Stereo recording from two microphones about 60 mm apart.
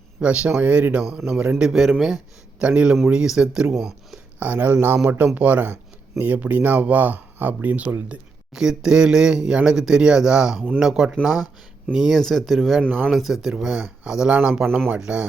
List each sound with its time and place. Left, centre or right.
0.2 s a man's voice: centre
1.7 s speech: centre
2.6 s a man's voice: centre
4.4 s speech: right
5.0 s speech: right
8.5 s a man's voice: centre